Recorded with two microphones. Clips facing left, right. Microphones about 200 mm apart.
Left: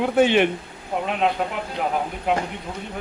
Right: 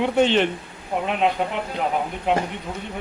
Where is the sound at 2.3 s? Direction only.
5° left (ahead or behind).